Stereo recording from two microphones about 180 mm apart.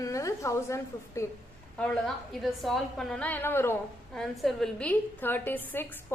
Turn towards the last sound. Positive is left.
turn(degrees=10)  # may be behind; listen again after turning